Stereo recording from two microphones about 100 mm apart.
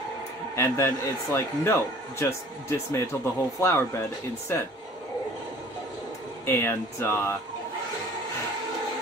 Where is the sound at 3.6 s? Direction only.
25° left (ahead or behind).